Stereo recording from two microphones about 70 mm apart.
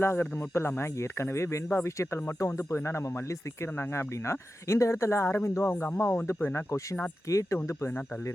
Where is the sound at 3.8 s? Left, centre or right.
Left.